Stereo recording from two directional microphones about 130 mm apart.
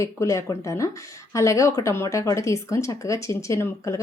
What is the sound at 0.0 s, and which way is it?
Speech, 20° left (ahead or behind).